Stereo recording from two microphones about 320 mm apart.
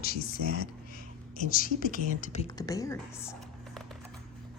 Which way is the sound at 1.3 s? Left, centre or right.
Left.